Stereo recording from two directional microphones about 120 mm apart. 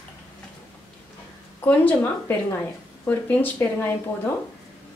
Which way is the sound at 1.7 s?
15° left (ahead or behind).